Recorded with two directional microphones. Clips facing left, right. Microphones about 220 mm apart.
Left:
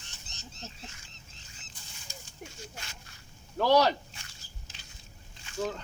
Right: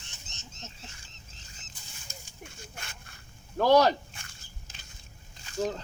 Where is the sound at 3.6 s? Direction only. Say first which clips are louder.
Right 2 dB; 45° right (ahead or behind).